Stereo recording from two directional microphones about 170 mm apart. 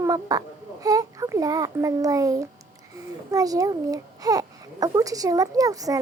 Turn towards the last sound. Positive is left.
turn(degrees=-20)  # may be behind; listen again after turning